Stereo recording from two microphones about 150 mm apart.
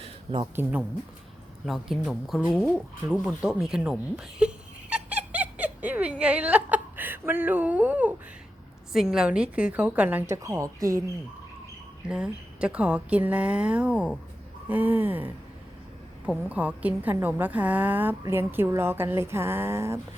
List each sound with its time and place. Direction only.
0.0 s a sound: 35° right (ahead or behind)
0.5 s a woman's voice: 10° right (ahead or behind)
12.0 s a woman's voice: 5° right (ahead or behind)